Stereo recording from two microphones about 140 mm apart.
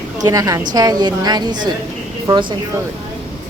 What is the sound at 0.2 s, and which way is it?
A woman's voice, 25° right (ahead or behind).